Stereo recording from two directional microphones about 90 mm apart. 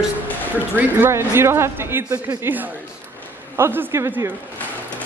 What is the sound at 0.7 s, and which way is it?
Speech, 25° right (ahead or behind).